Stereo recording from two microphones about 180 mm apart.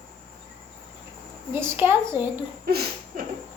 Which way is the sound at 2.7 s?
60° right (ahead or behind).